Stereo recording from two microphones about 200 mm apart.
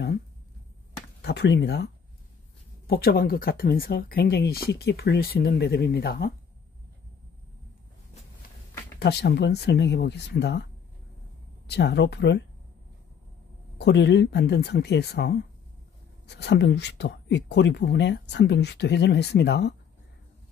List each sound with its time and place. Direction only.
1.2 s speech: 55° left (ahead or behind)
2.9 s speech: 50° left (ahead or behind)
9.0 s speech: 55° left (ahead or behind)
13.7 s speech: 55° left (ahead or behind)